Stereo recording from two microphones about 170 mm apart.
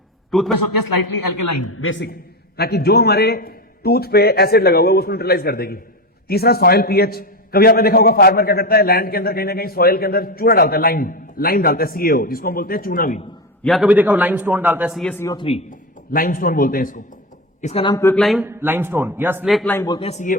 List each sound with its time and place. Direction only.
0.3 s a man's voice: centre (ahead or behind)
2.6 s a man's voice: 70° left (ahead or behind); by 13.2 s 50° left (ahead or behind)
13.7 s a man's voice: centre (ahead or behind)
13.9 s a man's voice: 10° right (ahead or behind)
14.9 s a man's voice: 10° left (ahead or behind)
15.3 s a man's voice: 30° left (ahead or behind)
16.1 s a man's voice: 55° left (ahead or behind)
17.6 s speech: 40° left (ahead or behind)
17.8 s a man's voice: 15° left (ahead or behind)
18.2 s a man's voice: centre (ahead or behind)
18.4 s a man's voice: 15° right (ahead or behind)
19.5 s a man's voice: centre (ahead or behind)
19.7 s a man's voice: 20° left (ahead or behind)
20.0 s a man's voice: 40° left (ahead or behind)